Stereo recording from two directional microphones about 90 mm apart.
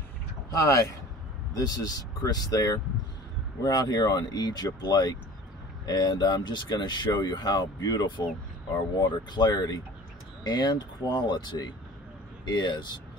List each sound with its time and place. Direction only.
0.5 s speech: 40° left (ahead or behind); by 12.8 s 55° left (ahead or behind)